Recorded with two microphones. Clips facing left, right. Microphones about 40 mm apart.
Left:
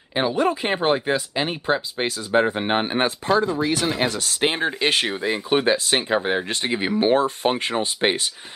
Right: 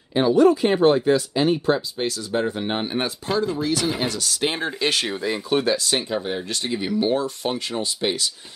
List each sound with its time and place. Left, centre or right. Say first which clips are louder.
0.1 s speech: right 5 dB; left